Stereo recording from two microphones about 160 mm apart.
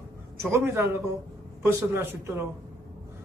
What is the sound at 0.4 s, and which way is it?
A man's voice, 15° right (ahead or behind).